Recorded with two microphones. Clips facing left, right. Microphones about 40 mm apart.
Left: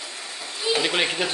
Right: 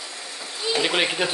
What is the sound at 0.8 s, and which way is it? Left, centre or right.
Speech, centre.